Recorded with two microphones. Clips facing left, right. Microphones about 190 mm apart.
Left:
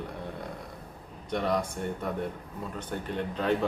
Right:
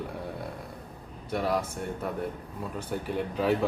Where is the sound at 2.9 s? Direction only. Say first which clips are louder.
Right 2 dB; 10° right (ahead or behind).